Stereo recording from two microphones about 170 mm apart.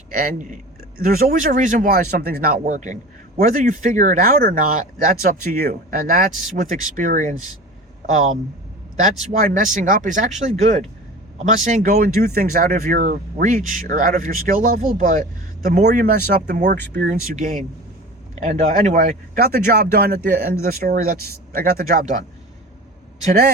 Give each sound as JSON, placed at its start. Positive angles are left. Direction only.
{"t": 0.1, "sound": "speech", "side_deg": -55}
{"t": 2.6, "sound": "speech", "side_deg": -45}
{"t": 9.4, "sound": "speech", "side_deg": -50}
{"t": 15.8, "sound": "speech", "side_deg": -65}
{"t": 18.4, "sound": "speech", "side_deg": -45}
{"t": 20.4, "sound": "speech", "side_deg": -60}